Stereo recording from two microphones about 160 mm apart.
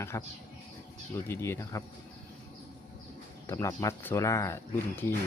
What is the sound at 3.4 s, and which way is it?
Speech, 15° left (ahead or behind).